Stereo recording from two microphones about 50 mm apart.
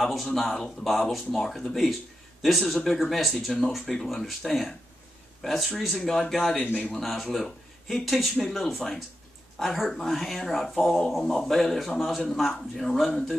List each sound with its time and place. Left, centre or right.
0.0 s speech: centre
5.9 s speech: centre
6.5 s speech: left
6.8 s speech: centre